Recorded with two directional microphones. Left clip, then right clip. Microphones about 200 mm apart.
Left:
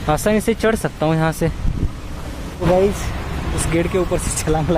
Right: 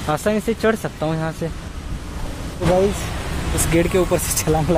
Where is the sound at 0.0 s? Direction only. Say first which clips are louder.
Left 3 dB; 10° left (ahead or behind).